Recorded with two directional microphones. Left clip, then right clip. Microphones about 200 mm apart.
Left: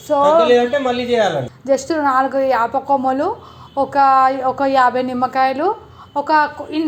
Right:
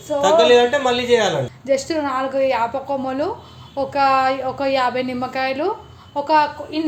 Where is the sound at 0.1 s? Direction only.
35° left (ahead or behind).